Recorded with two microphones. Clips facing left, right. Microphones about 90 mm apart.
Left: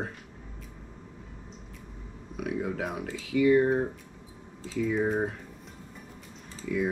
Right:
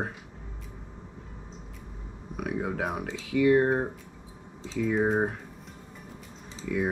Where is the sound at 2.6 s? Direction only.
5° right (ahead or behind).